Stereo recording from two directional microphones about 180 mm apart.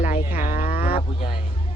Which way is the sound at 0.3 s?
50° left (ahead or behind).